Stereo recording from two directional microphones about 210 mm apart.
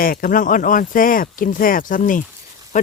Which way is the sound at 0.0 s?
40° left (ahead or behind).